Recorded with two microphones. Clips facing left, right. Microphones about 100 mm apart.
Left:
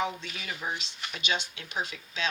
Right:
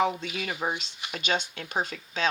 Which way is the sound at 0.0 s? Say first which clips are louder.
Right 6 dB; 50° right (ahead or behind).